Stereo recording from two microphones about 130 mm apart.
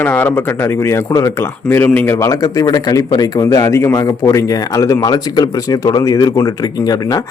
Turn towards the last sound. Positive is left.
turn(degrees=30)  # may be behind; listen again after turning